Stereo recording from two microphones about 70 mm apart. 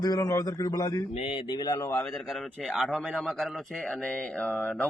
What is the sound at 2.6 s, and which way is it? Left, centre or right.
A man's voice, centre.